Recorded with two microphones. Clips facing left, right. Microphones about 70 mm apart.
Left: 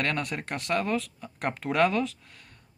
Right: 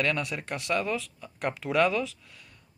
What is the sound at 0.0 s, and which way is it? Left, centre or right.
Speech, left.